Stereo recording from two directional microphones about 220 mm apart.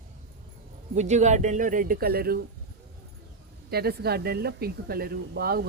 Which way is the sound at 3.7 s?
45° right (ahead or behind).